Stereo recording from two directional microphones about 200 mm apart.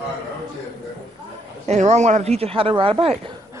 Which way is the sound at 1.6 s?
35° right (ahead or behind).